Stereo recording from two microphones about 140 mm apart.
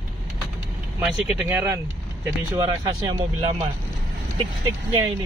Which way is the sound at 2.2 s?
25° right (ahead or behind).